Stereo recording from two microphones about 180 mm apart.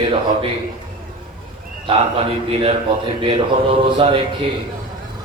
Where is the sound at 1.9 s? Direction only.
35° right (ahead or behind).